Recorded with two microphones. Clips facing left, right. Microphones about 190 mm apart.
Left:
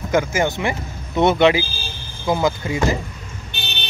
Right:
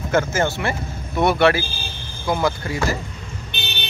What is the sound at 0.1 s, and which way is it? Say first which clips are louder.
Speech: left 1 dB; 15° left (ahead or behind).